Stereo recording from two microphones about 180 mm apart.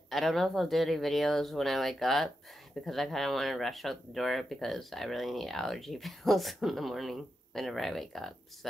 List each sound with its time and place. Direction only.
0.1 s speech: centre (ahead or behind)